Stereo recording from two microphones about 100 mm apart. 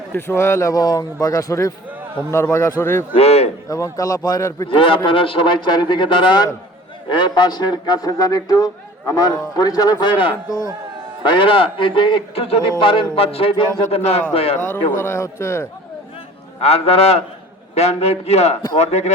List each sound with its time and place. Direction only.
0.1 s speech: 25° left (ahead or behind)
0.7 s a man's voice: 40° left (ahead or behind)
3.2 s a sound: 90° left
3.7 s a man's voice: 35° left (ahead or behind)
4.6 s a man's voice: 60° left (ahead or behind); by 12.7 s 80° left
12.8 s a man's voice: 65° left (ahead or behind); by 14.2 s 90° left
14.3 s speech: 80° left
14.7 s speech: 25° left (ahead or behind)
16.6 s a man's voice: 90° left